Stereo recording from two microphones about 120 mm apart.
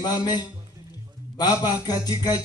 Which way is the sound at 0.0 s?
35° left (ahead or behind).